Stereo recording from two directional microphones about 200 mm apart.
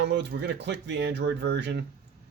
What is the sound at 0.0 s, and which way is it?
Speech, 60° right (ahead or behind).